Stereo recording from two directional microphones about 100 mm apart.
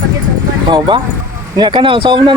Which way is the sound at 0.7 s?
50° right (ahead or behind).